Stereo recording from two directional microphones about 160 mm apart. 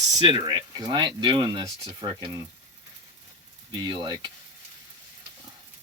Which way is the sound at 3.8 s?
30° right (ahead or behind).